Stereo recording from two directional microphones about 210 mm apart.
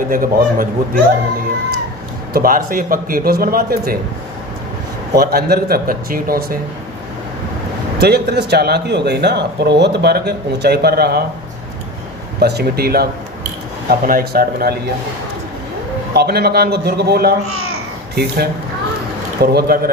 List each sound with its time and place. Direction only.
0.1 s a man's voice: 40° right (ahead or behind)
2.3 s speech: 40° right (ahead or behind)
5.1 s speech: 50° right (ahead or behind)
7.9 s speech: 50° right (ahead or behind)
12.4 s speech: 50° right (ahead or behind)
16.1 s speech: 50° right (ahead or behind)